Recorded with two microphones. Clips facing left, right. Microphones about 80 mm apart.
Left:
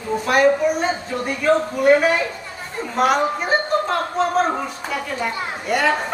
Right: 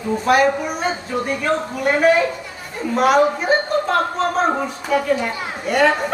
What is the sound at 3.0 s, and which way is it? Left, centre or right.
Speech, centre.